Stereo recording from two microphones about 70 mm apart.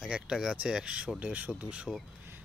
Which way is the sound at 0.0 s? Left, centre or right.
Centre.